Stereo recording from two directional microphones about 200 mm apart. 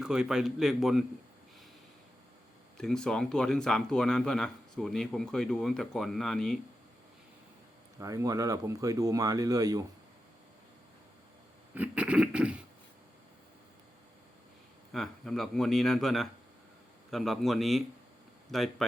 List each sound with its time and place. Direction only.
0.0 s speech: 5° right (ahead or behind)
2.7 s speech: 5° left (ahead or behind)
7.9 s speech: 15° right (ahead or behind)
11.7 s a sound: 5° right (ahead or behind)
14.9 s speech: centre (ahead or behind)